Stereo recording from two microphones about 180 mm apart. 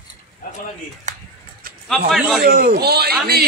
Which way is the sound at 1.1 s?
40° right (ahead or behind).